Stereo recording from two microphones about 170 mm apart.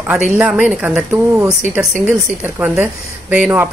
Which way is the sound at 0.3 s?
10° right (ahead or behind).